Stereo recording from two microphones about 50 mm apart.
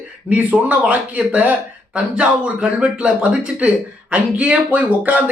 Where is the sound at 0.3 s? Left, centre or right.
Right.